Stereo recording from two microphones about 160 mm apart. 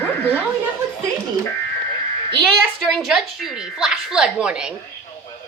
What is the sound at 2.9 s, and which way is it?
Speech, centre (ahead or behind).